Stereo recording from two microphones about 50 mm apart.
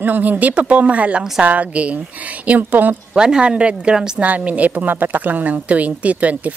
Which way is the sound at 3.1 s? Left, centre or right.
Centre.